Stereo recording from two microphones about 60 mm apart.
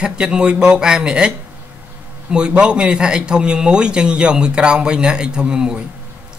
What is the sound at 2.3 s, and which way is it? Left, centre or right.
A man's voice, centre.